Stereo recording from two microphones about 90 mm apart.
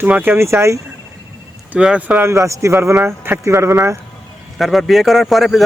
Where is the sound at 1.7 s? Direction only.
10° right (ahead or behind).